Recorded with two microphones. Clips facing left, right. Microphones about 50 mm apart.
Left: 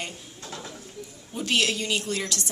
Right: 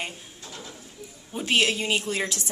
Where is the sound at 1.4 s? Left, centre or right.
Centre.